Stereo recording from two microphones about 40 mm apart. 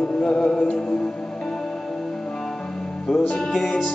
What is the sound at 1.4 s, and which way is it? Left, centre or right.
Music, centre.